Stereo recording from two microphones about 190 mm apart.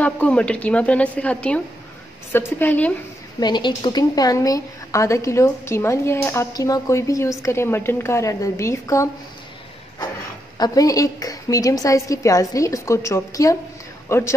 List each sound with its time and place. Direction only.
0.0 s a woman's voice: 5° left (ahead or behind)
3.3 s a woman's voice: 25° left (ahead or behind)
10.6 s a woman's voice: 20° left (ahead or behind)